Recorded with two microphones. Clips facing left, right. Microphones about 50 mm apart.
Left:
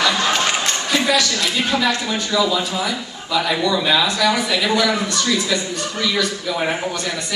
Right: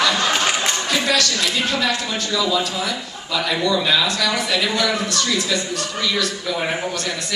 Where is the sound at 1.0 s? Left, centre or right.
Centre.